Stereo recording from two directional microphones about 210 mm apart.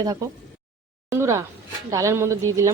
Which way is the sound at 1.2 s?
10° right (ahead or behind).